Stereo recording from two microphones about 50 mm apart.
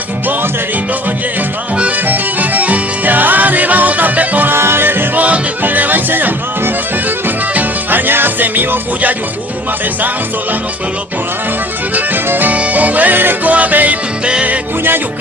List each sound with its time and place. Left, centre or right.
2.0 s music: right
4.5 s music: right
5.2 s music: right
7.5 s music: right
11.9 s music: right